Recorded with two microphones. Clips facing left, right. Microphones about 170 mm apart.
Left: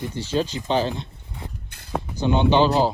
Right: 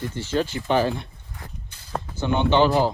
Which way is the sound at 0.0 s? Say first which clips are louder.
Even; 15° left (ahead or behind).